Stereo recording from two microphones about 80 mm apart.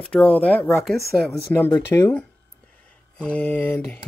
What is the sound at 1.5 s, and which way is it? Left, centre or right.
Mantra, left.